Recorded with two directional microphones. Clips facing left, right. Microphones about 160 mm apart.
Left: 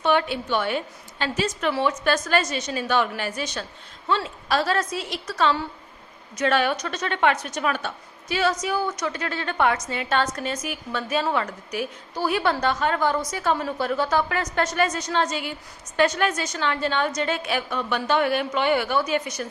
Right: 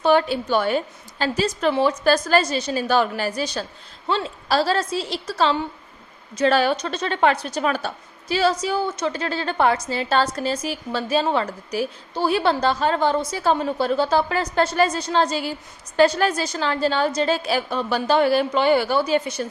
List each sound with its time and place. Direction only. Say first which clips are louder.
0.0 s a woman's voice: right 4 dB; 35° right (ahead or behind)